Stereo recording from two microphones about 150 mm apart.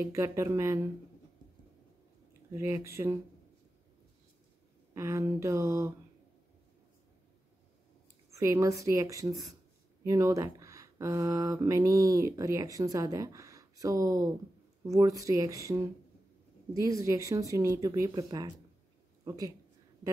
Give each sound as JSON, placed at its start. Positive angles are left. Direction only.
{"t": 0.0, "sound": "speech", "side_deg": -20}
{"t": 2.5, "sound": "speech", "side_deg": -20}
{"t": 4.9, "sound": "speech", "side_deg": -20}
{"t": 8.3, "sound": "a woman's voice", "side_deg": -20}